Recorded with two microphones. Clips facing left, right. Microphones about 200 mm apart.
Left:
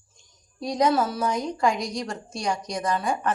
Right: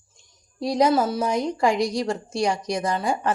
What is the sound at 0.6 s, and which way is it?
A woman's voice, 30° right (ahead or behind).